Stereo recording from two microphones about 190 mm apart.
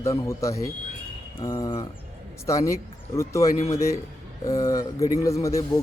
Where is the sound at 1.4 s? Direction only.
20° left (ahead or behind).